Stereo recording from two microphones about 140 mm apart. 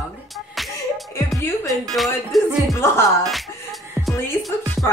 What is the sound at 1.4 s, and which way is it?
Speech, 15° left (ahead or behind).